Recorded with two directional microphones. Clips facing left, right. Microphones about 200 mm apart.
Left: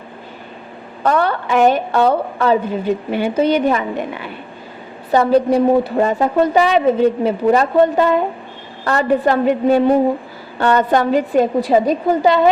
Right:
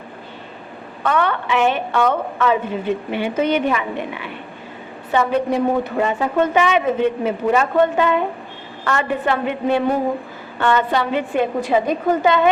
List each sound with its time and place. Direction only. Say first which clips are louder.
1.0 s a woman's voice: left 3 dB; 35° left (ahead or behind)